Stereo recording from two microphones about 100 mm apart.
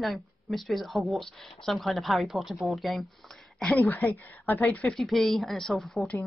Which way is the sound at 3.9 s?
25° left (ahead or behind).